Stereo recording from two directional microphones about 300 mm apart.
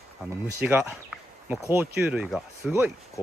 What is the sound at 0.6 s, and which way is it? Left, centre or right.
Speech, centre.